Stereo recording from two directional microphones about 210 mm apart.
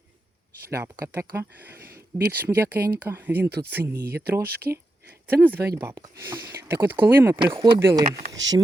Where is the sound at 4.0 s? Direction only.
50° right (ahead or behind).